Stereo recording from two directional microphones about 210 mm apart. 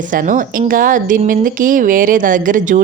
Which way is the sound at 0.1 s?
40° right (ahead or behind).